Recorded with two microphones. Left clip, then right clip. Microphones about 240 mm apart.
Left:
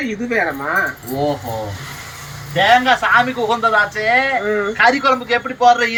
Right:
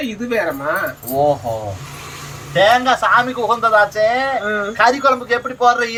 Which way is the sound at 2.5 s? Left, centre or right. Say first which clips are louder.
Even; right.